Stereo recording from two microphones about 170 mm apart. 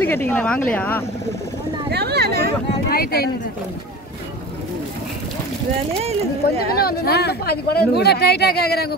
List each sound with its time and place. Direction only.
0.0 s speech: 10° left (ahead or behind)
1.9 s speech: 75° right (ahead or behind)
2.9 s speech: 65° left (ahead or behind)
6.8 s speech: 65° left (ahead or behind)